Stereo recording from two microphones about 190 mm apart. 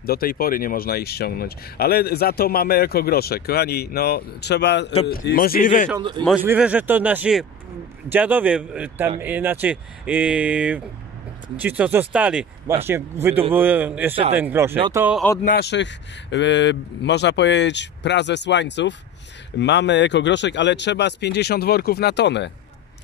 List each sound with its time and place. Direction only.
0.0 s a man's voice: 50° left (ahead or behind)
6.4 s speech: 10° right (ahead or behind)
15.4 s speech: 55° left (ahead or behind)